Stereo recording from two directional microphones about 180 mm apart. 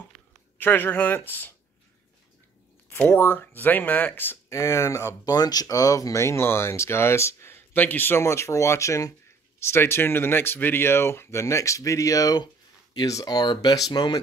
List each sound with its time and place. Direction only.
0.6 s speech: 10° left (ahead or behind)
2.9 s speech: 10° left (ahead or behind)